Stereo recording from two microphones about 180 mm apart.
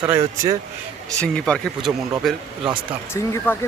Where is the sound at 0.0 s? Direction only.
15° right (ahead or behind).